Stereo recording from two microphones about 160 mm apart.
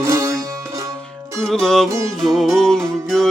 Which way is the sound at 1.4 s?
5° left (ahead or behind).